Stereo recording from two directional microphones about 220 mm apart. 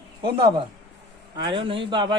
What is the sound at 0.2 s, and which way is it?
A man's voice, 20° right (ahead or behind).